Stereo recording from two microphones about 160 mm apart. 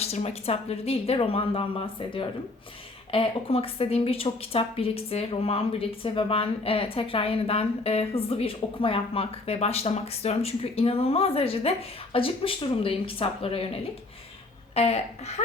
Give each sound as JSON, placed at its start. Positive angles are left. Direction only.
{"t": 0.0, "sound": "a woman's voice", "side_deg": 40}
{"t": 14.8, "sound": "a woman's voice", "side_deg": 40}